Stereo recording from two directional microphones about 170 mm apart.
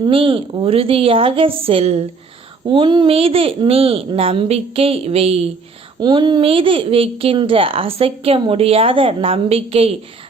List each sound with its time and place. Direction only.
0.0 s a woman's voice: 30° right (ahead or behind)
2.6 s a woman's voice: 25° right (ahead or behind)